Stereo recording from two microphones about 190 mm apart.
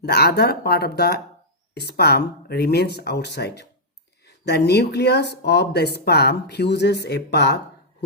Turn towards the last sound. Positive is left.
turn(degrees=60)  # may be behind; listen again after turning